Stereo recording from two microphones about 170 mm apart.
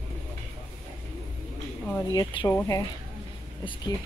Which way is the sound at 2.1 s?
25° left (ahead or behind).